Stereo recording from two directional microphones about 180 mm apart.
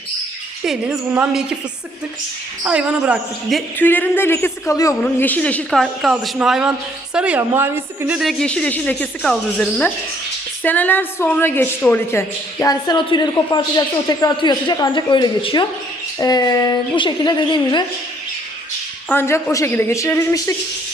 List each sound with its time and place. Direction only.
0.6 s a woman's voice: 5° right (ahead or behind)
2.6 s a woman's voice: 5° right (ahead or behind)
3.8 s a woman's voice: 10° left (ahead or behind); by 17.8 s 25° left (ahead or behind)
19.1 s speech: 15° left (ahead or behind)